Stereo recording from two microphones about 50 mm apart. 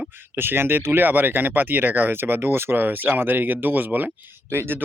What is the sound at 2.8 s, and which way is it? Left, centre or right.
Speech, right.